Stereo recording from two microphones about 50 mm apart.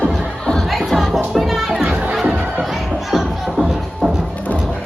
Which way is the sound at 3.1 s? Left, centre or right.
Centre.